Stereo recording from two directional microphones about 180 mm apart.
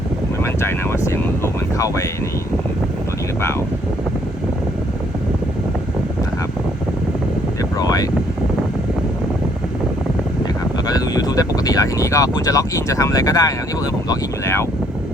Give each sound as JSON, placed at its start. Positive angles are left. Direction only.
{"t": 0.4, "sound": "speech", "side_deg": 15}
{"t": 7.8, "sound": "speech", "side_deg": 20}
{"t": 10.8, "sound": "speech", "side_deg": 20}